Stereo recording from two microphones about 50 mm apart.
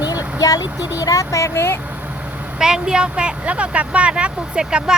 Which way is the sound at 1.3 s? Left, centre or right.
Left.